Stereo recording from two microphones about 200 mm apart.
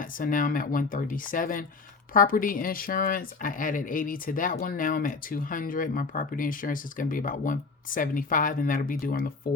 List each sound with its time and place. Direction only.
0.0 s speech: 45° left (ahead or behind)